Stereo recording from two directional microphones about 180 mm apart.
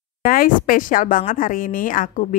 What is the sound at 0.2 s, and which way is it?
Speech, 50° left (ahead or behind).